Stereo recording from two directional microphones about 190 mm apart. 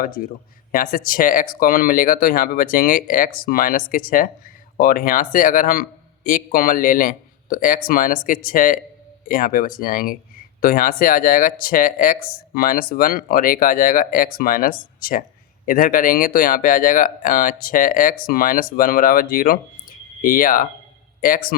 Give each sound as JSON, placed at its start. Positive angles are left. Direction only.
{"t": 0.0, "sound": "speech", "side_deg": 50}